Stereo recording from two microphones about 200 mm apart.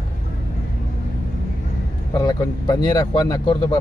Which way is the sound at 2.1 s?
20° left (ahead or behind).